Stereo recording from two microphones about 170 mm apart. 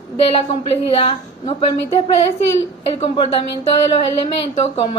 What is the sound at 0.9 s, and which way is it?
A woman's voice, 35° left (ahead or behind).